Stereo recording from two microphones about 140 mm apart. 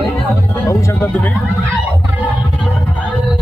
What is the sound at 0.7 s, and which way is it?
Music, 20° left (ahead or behind).